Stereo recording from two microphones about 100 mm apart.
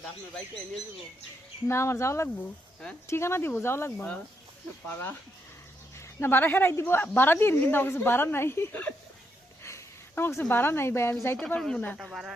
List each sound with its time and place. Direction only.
1.6 s a woman's voice: 25° left (ahead or behind)
9.6 s a sound: 25° left (ahead or behind)
10.5 s a woman's voice: 20° left (ahead or behind)
11.3 s speech: 5° left (ahead or behind)